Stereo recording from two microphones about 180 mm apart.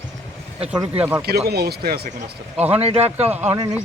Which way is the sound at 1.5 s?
60° right (ahead or behind).